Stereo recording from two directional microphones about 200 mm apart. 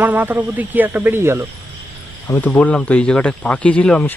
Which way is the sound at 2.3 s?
5° left (ahead or behind).